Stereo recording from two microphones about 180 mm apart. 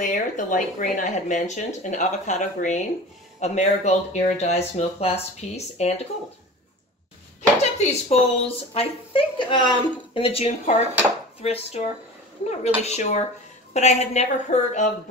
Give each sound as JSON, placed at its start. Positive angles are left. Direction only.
{"t": 0.0, "sound": "a woman's voice", "side_deg": 45}
{"t": 7.8, "sound": "a woman's voice", "side_deg": 35}